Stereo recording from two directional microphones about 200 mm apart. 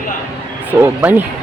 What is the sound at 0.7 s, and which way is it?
Speech, 10° right (ahead or behind).